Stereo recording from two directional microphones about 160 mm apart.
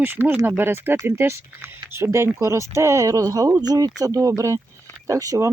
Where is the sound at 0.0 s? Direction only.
10° right (ahead or behind).